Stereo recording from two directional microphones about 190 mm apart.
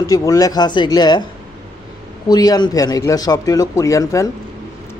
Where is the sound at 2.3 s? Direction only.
20° left (ahead or behind).